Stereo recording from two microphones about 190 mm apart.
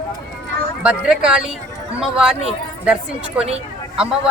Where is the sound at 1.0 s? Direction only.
5° right (ahead or behind).